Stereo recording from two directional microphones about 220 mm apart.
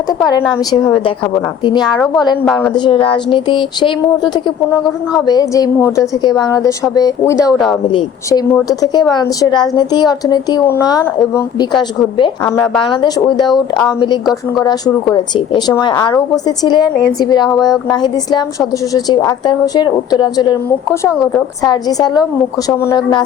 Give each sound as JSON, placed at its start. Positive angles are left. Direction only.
{"t": 0.3, "sound": "speech", "side_deg": 20}
{"t": 2.4, "sound": "a woman's voice", "side_deg": 5}
{"t": 2.7, "sound": "a woman's voice", "side_deg": 20}